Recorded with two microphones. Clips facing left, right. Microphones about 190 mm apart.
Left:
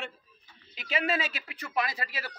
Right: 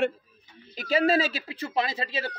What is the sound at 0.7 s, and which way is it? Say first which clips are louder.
Speech: right 8 dB; 40° right (ahead or behind).